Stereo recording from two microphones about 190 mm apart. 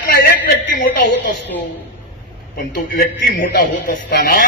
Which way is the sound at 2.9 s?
50° left (ahead or behind).